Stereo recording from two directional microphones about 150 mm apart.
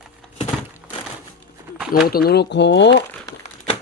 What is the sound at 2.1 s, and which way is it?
Speech, 90° left.